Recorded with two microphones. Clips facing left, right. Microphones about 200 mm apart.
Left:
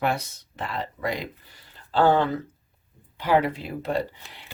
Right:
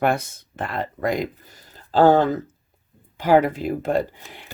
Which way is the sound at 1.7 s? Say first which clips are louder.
Right 5 dB; 40° right (ahead or behind).